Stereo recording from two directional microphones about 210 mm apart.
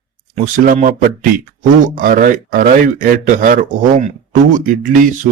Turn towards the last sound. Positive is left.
turn(degrees=-40)  # may be behind; listen again after turning